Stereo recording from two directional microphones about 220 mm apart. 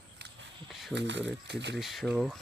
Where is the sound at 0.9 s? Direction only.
55° right (ahead or behind).